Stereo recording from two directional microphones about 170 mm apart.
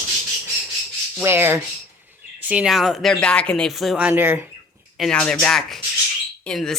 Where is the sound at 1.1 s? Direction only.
15° right (ahead or behind).